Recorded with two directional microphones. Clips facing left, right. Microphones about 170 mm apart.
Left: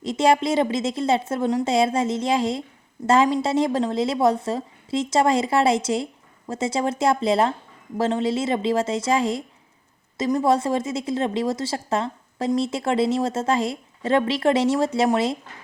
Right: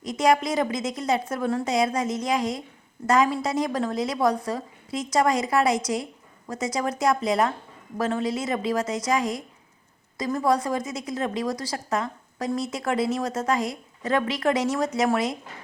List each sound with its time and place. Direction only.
0.0 s a woman's voice: 25° left (ahead or behind)